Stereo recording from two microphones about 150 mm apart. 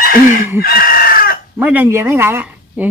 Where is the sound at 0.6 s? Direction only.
80° left.